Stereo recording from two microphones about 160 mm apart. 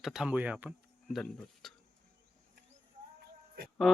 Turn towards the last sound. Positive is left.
turn(degrees=0)  # may be behind; listen again after turning